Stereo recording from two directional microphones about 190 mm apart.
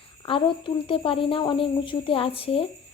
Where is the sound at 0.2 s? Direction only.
25° left (ahead or behind).